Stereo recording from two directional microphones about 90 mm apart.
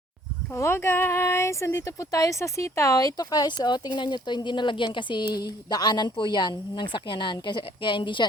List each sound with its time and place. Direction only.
0.5 s speech: 30° left (ahead or behind); by 8.3 s 65° left (ahead or behind)